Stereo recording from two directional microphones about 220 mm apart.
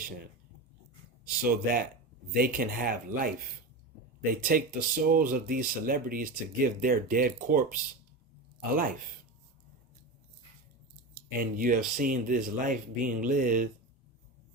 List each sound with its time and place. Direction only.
1.5 s speech: 40° right (ahead or behind)
11.1 s speech: 40° right (ahead or behind)